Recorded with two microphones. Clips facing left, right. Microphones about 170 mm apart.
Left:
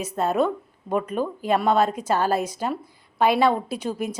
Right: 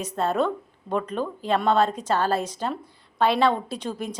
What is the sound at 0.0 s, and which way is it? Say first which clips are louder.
A woman's voice: left 2 dB; 10° left (ahead or behind).